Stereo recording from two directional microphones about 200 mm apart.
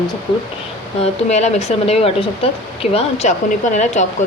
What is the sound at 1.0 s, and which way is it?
Speech, 35° left (ahead or behind).